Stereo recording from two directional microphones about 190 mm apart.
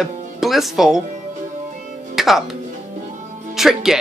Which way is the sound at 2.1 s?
Centre (ahead or behind).